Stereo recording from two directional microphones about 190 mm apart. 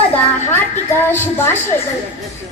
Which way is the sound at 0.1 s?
10° left (ahead or behind).